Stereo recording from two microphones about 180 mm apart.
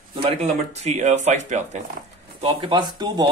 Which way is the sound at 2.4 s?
25° right (ahead or behind).